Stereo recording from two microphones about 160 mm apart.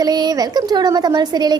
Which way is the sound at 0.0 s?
25° right (ahead or behind).